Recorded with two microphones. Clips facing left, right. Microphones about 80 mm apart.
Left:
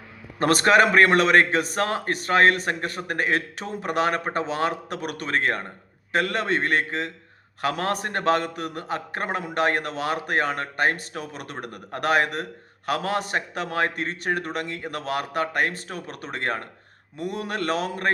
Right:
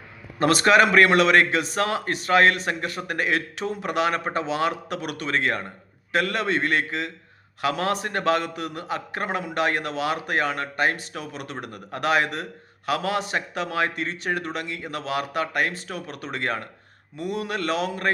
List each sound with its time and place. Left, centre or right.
0.3 s a man's voice: left